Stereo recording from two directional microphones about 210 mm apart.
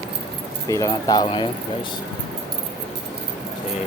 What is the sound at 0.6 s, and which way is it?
Speech, 15° left (ahead or behind).